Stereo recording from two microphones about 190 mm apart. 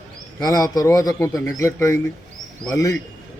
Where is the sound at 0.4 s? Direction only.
20° left (ahead or behind).